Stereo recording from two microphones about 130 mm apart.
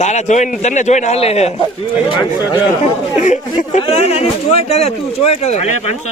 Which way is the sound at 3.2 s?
65° left (ahead or behind).